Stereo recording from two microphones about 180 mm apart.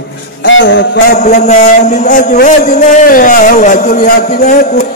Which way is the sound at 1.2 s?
40° left (ahead or behind).